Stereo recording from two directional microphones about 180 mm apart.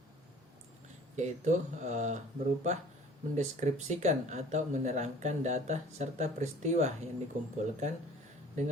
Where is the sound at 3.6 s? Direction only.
40° right (ahead or behind).